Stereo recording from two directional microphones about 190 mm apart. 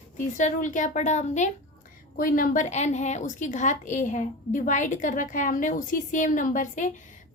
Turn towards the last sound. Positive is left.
turn(degrees=40)  # may be behind; listen again after turning